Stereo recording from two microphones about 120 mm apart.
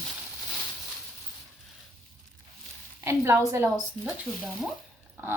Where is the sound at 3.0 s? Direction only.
20° right (ahead or behind).